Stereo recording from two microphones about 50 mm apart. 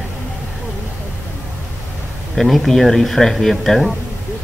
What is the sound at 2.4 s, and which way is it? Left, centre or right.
A man's voice, centre.